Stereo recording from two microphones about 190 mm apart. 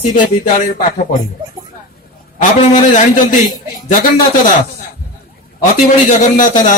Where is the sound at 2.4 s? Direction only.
40° left (ahead or behind).